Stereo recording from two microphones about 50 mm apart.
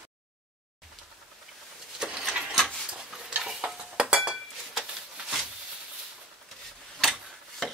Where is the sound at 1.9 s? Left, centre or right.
Centre.